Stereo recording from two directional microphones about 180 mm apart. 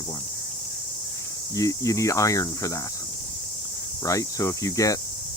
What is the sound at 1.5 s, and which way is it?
Speech, 20° left (ahead or behind).